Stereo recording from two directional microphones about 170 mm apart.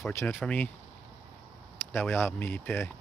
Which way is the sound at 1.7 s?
15° left (ahead or behind).